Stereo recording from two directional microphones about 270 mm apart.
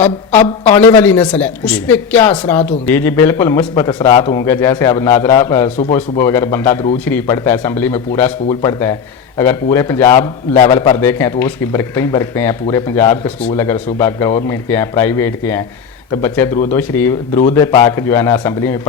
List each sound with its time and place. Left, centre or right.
0.6 s a man's voice: centre